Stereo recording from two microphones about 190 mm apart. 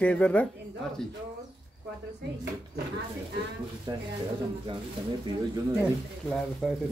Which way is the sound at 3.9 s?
20° right (ahead or behind).